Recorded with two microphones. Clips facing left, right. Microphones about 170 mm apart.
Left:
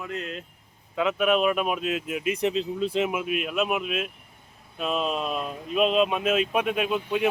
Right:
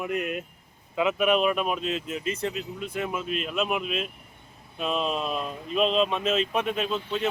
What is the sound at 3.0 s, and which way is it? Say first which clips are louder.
Speech: left 3 dB; 10° left (ahead or behind).